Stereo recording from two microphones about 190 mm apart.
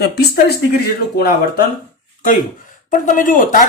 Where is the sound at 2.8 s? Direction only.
45° left (ahead or behind).